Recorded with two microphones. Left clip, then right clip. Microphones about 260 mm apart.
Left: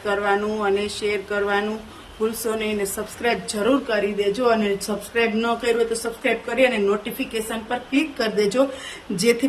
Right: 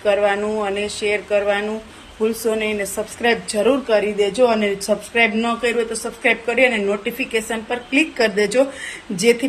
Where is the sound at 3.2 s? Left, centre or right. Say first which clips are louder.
Right 4 dB; centre.